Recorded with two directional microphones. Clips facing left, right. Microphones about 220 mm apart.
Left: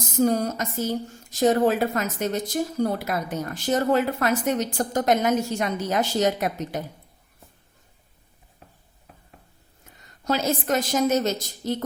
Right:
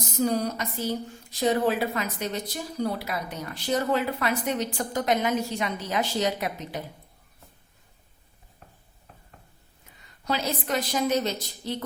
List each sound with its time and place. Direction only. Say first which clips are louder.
0.2 s a woman's voice: left 4 dB; 45° left (ahead or behind)
10.2 s a woman's voice: left 5 dB; 45° left (ahead or behind)